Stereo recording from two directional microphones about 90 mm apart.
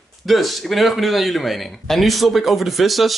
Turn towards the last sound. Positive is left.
turn(degrees=0)  # may be behind; listen again after turning